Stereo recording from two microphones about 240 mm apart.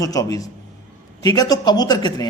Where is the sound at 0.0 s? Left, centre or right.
Centre.